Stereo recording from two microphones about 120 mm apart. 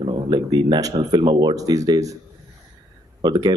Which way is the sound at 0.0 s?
35° right (ahead or behind).